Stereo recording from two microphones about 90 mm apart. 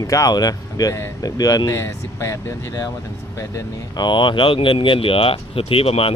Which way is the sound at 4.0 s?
60° left (ahead or behind).